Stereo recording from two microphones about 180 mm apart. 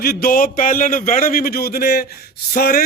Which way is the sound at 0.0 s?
55° left (ahead or behind).